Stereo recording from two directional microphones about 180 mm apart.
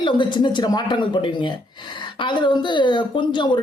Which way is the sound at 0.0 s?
25° left (ahead or behind).